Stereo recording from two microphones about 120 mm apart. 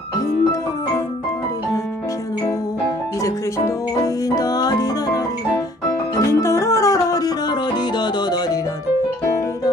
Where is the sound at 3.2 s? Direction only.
25° left (ahead or behind).